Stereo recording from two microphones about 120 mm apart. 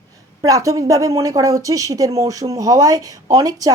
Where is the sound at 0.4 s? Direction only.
30° right (ahead or behind).